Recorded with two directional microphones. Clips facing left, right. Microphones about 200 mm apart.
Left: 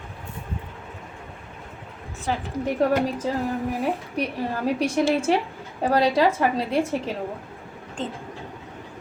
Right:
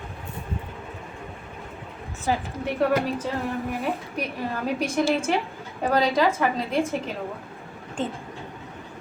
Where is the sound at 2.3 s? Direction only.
5° right (ahead or behind).